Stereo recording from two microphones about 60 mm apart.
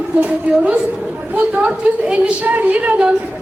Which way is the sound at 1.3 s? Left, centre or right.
Right.